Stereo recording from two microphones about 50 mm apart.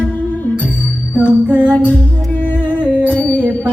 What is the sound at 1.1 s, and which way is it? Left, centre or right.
Music, right.